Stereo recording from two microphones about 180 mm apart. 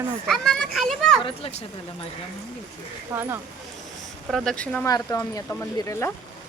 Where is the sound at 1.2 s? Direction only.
30° left (ahead or behind).